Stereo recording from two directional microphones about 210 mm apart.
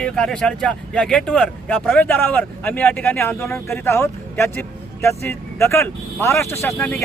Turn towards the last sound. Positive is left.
turn(degrees=10)  # may be behind; listen again after turning